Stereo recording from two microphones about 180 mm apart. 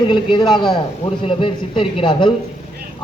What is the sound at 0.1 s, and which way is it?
A man's voice, 25° left (ahead or behind).